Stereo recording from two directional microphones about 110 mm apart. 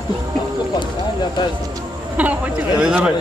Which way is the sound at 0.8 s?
40° left (ahead or behind).